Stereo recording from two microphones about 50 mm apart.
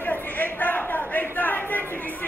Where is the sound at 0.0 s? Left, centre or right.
Left.